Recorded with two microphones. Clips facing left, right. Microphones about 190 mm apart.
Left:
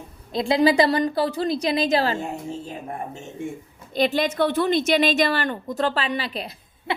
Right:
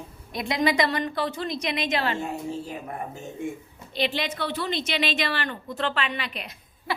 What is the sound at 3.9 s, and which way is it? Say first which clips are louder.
A woman's voice: left 6 dB; 45° left (ahead or behind).